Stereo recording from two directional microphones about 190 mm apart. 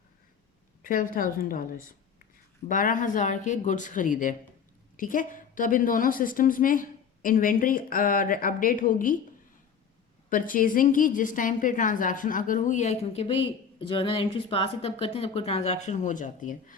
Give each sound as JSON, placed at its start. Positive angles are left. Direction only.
{"t": 0.8, "sound": "a woman's voice", "side_deg": 45}
{"t": 10.2, "sound": "a woman's voice", "side_deg": 45}